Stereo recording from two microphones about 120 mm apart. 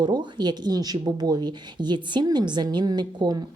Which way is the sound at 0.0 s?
40° right (ahead or behind).